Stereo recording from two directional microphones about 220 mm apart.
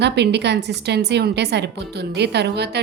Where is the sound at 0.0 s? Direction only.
50° right (ahead or behind).